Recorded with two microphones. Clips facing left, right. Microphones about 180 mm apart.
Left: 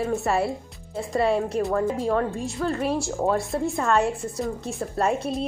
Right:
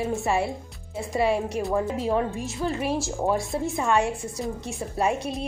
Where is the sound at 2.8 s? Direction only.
Centre (ahead or behind).